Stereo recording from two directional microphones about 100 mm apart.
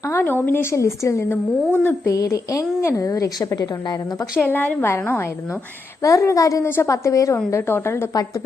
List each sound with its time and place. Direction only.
0.0 s a woman's voice: 25° left (ahead or behind)
2.1 s a woman's voice: 30° left (ahead or behind)
4.4 s a woman's voice: 20° left (ahead or behind)